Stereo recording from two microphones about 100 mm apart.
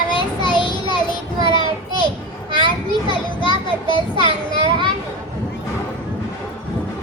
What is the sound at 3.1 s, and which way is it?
Children playing, 50° left (ahead or behind).